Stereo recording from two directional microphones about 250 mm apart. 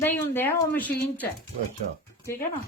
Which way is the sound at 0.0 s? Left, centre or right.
Centre.